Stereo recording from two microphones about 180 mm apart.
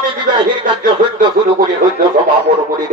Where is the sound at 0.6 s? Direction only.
50° right (ahead or behind).